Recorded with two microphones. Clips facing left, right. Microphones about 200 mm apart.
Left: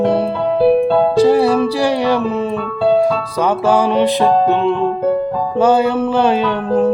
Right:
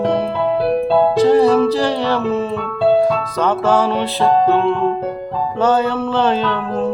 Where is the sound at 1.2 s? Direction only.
10° left (ahead or behind).